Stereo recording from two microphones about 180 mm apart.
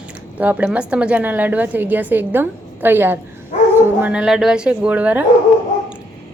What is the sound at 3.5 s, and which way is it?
Dog, 40° left (ahead or behind).